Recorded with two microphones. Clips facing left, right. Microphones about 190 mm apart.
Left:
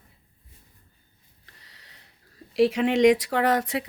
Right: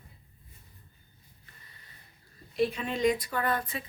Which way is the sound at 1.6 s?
90° left.